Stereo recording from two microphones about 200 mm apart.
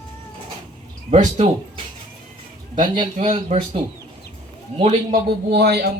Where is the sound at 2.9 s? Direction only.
30° right (ahead or behind).